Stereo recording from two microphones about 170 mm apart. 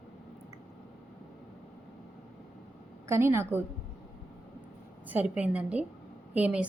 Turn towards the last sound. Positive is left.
turn(degrees=-10)  # may be behind; listen again after turning